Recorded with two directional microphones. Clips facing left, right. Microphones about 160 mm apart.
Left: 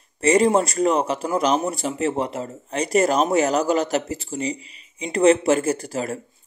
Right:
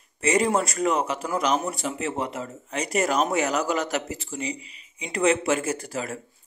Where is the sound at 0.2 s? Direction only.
35° left (ahead or behind).